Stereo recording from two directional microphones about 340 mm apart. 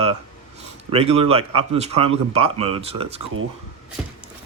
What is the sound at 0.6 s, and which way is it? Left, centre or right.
Speech, centre.